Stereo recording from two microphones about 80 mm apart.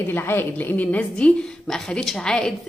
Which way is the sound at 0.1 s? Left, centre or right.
Left.